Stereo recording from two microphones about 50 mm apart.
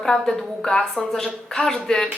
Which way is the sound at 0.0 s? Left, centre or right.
Centre.